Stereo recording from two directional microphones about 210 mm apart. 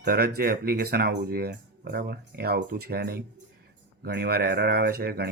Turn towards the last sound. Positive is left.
turn(degrees=-45)  # may be behind; listen again after turning